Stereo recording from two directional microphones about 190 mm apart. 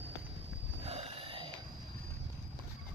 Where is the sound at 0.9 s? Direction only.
30° right (ahead or behind).